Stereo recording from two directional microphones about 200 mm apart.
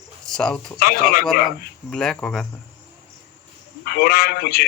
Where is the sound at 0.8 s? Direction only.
45° left (ahead or behind).